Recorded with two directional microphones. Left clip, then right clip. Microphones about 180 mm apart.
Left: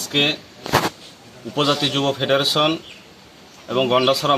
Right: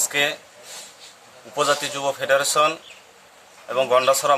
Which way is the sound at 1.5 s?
5° right (ahead or behind).